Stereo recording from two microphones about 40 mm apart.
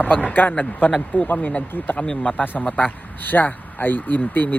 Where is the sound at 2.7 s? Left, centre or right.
Left.